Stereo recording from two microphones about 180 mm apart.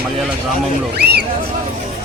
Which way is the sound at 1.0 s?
60° right (ahead or behind).